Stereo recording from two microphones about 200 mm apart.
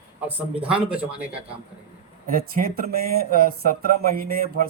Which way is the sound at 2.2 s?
45° right (ahead or behind).